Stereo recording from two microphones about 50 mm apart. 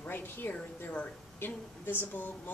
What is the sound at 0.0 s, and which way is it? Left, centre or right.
Speech, left.